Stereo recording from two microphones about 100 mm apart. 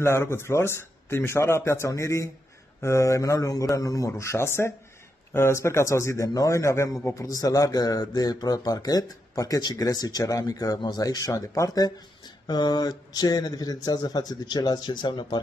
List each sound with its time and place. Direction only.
0.0 s a man's voice: 25° left (ahead or behind); by 15.3 s 50° left (ahead or behind)